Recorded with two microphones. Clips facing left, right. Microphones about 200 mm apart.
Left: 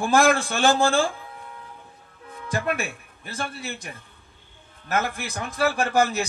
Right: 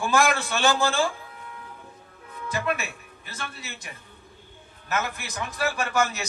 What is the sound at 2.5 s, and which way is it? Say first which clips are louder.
A man's voice: left 2 dB; 50° left (ahead or behind).